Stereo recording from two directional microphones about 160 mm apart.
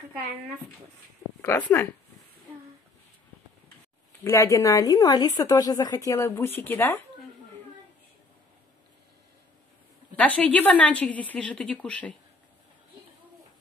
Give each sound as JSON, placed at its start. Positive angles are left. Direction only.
{"t": 1.4, "sound": "a woman's voice", "side_deg": 15}
{"t": 4.2, "sound": "a woman's voice", "side_deg": 15}
{"t": 10.1, "sound": "a woman's voice", "side_deg": 10}